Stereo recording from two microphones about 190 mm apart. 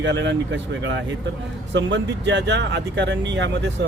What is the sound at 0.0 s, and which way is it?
Speech, 70° right (ahead or behind).